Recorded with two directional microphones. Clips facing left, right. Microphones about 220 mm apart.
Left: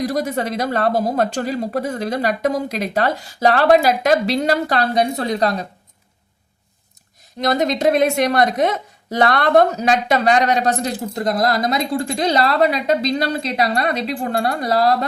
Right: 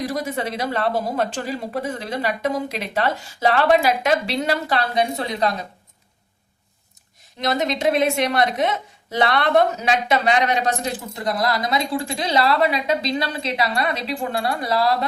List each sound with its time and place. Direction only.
0.1 s speech: 45° left (ahead or behind)
7.4 s a woman's voice: 40° left (ahead or behind)